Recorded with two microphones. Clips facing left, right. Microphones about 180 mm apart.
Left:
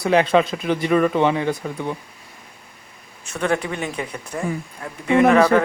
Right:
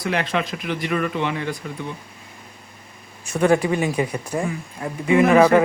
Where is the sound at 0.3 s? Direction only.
30° left (ahead or behind).